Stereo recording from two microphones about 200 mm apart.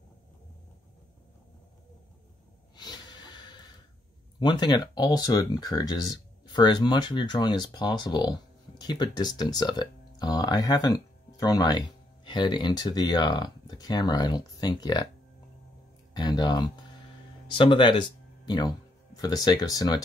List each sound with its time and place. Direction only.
2.7 s snort: 20° left (ahead or behind)
4.4 s speech: 20° left (ahead or behind)
16.1 s speech: 20° left (ahead or behind)